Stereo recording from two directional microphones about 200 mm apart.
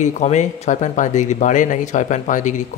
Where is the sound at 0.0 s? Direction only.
35° left (ahead or behind).